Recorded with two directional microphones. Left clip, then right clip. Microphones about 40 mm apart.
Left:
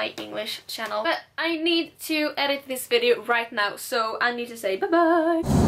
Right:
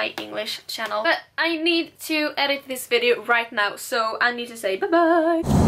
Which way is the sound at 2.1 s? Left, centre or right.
Left.